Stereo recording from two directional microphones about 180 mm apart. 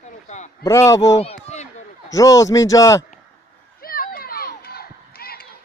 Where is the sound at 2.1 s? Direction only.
20° left (ahead or behind).